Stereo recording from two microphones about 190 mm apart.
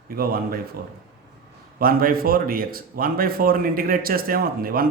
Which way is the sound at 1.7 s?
50° right (ahead or behind).